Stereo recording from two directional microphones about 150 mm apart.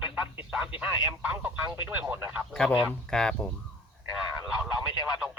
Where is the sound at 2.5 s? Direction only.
5° left (ahead or behind).